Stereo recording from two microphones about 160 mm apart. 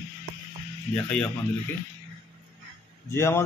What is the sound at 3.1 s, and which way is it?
Speech, 15° left (ahead or behind).